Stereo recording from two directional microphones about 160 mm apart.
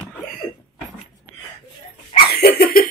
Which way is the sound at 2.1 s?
80° left.